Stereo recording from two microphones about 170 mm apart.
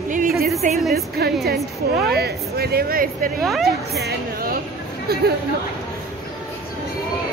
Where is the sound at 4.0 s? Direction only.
60° right (ahead or behind).